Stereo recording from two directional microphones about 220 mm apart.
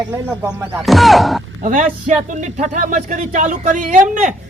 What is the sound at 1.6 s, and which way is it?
Speech, 35° right (ahead or behind).